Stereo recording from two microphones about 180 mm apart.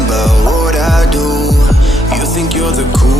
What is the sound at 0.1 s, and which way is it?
Music, centre (ahead or behind).